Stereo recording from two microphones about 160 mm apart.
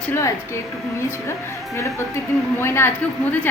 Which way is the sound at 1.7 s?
20° left (ahead or behind).